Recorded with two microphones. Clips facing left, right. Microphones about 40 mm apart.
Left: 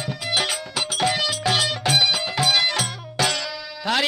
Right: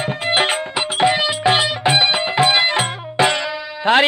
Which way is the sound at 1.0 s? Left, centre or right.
Right.